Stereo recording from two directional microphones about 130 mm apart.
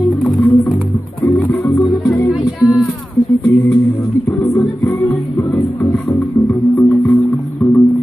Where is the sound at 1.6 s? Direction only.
25° left (ahead or behind).